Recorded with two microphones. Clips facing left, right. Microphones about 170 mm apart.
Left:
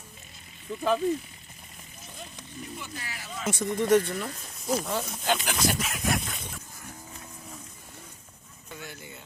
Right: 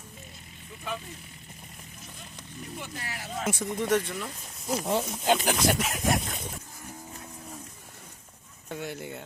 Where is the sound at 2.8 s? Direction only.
55° right (ahead or behind).